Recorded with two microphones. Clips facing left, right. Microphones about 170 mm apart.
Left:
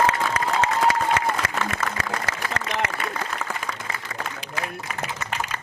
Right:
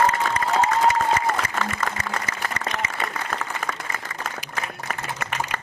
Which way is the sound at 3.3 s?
50° right (ahead or behind).